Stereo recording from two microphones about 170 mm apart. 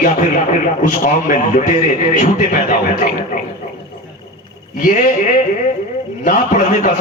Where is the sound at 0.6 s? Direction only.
50° left (ahead or behind).